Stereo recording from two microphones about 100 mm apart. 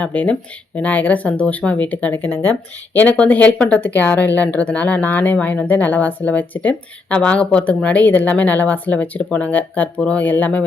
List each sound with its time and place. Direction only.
0.0 s speech: 15° left (ahead or behind)